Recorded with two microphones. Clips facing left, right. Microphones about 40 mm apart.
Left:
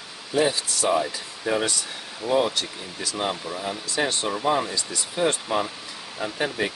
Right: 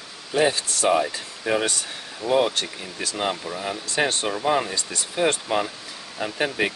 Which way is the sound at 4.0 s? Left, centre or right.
Right.